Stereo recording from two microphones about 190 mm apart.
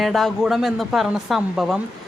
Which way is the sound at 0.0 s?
Centre (ahead or behind).